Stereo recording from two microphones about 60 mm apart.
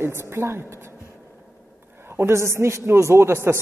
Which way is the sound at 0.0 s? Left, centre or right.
Right.